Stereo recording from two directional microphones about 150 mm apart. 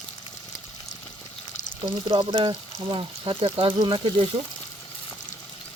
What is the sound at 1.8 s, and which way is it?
Speech, 30° right (ahead or behind).